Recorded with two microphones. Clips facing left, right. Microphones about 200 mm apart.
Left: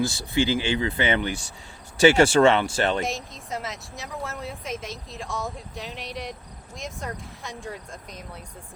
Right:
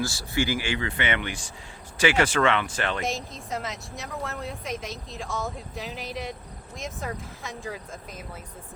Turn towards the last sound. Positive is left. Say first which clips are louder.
# even
turn(degrees=0)  # may be behind; listen again after turning